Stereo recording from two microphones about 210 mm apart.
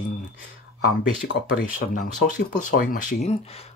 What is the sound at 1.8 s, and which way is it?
Speech, 40° left (ahead or behind).